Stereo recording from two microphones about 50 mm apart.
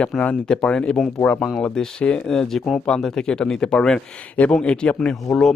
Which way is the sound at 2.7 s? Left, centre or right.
Centre.